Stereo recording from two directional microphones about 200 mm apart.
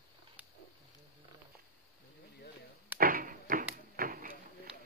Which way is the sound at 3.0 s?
45° right (ahead or behind).